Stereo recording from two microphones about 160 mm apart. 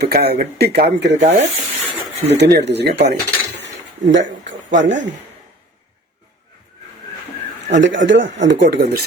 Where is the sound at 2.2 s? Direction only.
90° right.